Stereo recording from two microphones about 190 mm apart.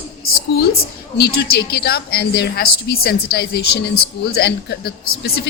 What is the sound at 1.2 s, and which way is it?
A woman's voice, 60° left (ahead or behind).